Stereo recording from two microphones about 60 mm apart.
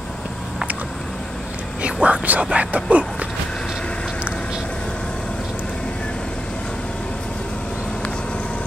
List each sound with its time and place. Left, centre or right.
1.8 s speech: centre